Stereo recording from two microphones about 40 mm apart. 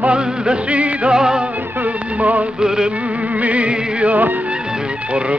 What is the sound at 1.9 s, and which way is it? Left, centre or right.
Music, right.